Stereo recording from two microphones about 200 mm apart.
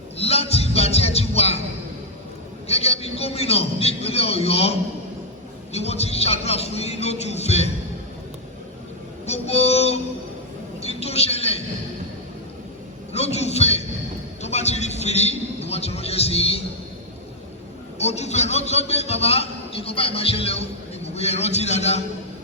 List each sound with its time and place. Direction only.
0.2 s music: 30° left (ahead or behind)
2.6 s a man's voice: 30° left (ahead or behind)
9.2 s child singing: 30° left (ahead or behind)
10.8 s a sound: 30° left (ahead or behind)
13.1 s a sound: 30° left (ahead or behind)
18.0 s a man's voice: 35° left (ahead or behind)